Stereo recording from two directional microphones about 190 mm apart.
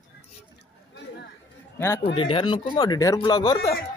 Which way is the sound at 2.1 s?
30° left (ahead or behind).